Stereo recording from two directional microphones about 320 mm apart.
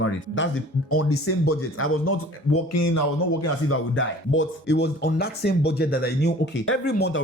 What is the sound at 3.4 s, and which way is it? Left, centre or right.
Speech, left.